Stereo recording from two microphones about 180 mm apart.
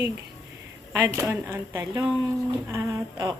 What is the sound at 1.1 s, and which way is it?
A woman's voice, 15° right (ahead or behind).